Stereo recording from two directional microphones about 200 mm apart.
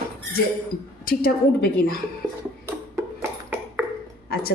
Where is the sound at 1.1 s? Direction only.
45° left (ahead or behind).